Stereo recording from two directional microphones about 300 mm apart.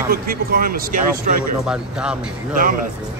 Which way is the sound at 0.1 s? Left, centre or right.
Right.